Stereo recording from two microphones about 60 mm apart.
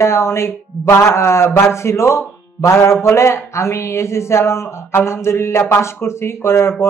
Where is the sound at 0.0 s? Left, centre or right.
Left.